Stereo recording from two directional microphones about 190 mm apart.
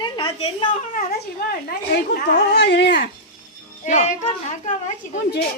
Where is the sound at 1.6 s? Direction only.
55° left (ahead or behind).